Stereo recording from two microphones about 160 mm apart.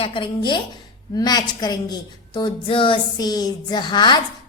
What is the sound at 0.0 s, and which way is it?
A woman's voice, 30° left (ahead or behind).